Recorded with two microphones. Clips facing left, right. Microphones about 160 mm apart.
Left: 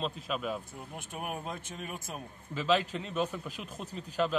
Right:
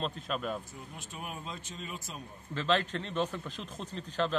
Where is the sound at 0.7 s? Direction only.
55° left (ahead or behind).